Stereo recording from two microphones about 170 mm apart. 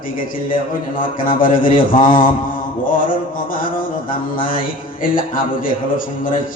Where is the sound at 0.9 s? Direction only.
55° left (ahead or behind).